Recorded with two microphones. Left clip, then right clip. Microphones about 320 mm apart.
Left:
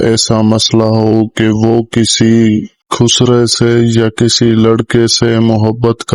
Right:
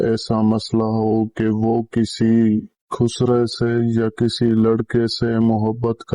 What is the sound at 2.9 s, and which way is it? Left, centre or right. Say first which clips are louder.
Speech: left 9 dB; left.